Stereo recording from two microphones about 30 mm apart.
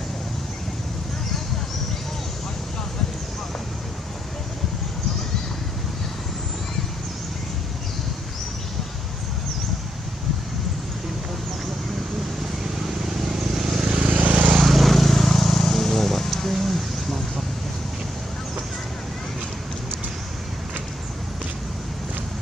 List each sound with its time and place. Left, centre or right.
12.8 s vehicle: centre
14.1 s vehicle: right
14.6 s vehicle: centre
16.3 s a sound: centre